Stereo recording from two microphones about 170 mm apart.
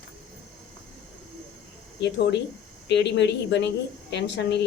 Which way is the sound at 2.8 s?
90° left.